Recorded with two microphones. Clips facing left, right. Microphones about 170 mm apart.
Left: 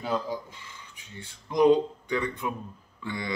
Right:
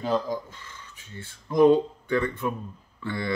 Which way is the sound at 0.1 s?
10° left (ahead or behind).